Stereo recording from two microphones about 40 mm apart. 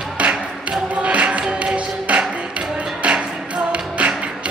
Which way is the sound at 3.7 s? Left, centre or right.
Right.